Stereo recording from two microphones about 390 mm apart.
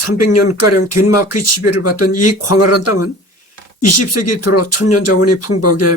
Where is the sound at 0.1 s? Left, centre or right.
Left.